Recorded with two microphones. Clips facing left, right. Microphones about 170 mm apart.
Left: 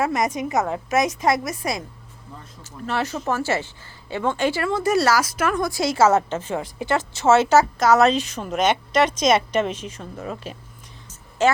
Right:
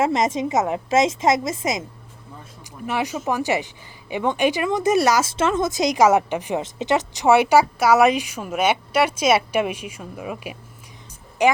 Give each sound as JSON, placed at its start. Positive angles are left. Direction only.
{"t": 0.0, "sound": "a woman's voice", "side_deg": -25}